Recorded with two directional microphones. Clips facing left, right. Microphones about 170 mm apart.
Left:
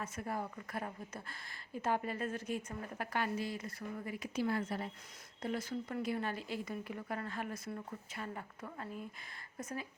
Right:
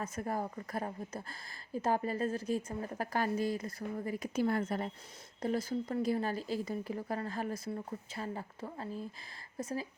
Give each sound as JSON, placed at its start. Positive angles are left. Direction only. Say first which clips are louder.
{"t": 0.0, "sound": "speech", "louder": "right 4 dB", "side_deg": -40}
{"t": 5.4, "sound": "speech", "louder": "right 5 dB", "side_deg": -35}